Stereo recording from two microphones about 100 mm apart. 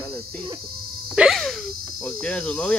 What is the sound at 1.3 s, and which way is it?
Cricket, 5° left (ahead or behind).